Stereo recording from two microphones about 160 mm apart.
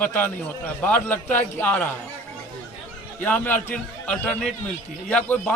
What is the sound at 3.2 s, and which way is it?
A man's voice, 10° left (ahead or behind).